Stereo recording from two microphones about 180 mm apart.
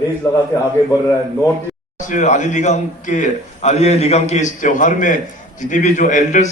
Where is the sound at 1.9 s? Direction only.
45° left (ahead or behind).